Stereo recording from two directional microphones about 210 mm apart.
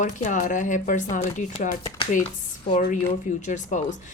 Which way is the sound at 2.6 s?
40° left (ahead or behind).